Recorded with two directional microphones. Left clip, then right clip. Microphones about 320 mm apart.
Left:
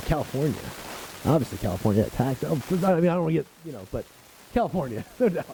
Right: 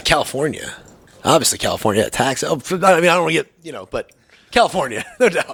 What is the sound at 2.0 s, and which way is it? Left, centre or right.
Speech, centre.